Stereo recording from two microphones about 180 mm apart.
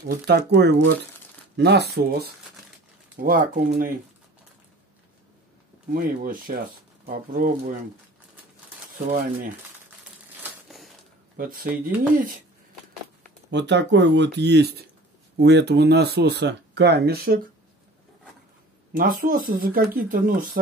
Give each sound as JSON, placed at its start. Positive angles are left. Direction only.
{"t": 0.1, "sound": "speech", "side_deg": -65}
{"t": 3.2, "sound": "speech", "side_deg": -50}
{"t": 5.9, "sound": "speech", "side_deg": -50}
{"t": 8.9, "sound": "speech", "side_deg": -50}
{"t": 11.3, "sound": "speech", "side_deg": -50}
{"t": 13.5, "sound": "speech", "side_deg": -75}
{"t": 18.9, "sound": "speech", "side_deg": -50}